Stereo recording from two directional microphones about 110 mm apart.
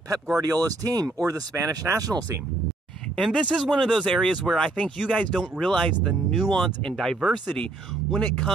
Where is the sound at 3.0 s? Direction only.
10° left (ahead or behind).